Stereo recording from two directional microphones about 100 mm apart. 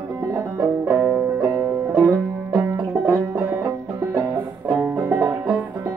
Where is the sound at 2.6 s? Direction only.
25° right (ahead or behind).